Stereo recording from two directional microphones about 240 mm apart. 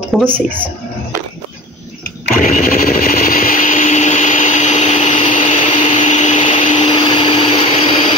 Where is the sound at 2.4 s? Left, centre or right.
Left.